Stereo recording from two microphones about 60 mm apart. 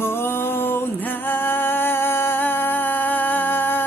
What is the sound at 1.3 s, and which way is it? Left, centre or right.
Music, left.